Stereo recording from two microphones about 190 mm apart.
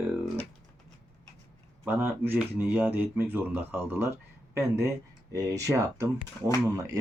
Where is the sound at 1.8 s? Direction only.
10° right (ahead or behind).